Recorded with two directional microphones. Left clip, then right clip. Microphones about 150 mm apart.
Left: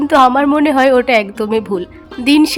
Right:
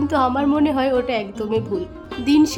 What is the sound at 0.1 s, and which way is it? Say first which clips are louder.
Speech: left 11 dB; 30° left (ahead or behind).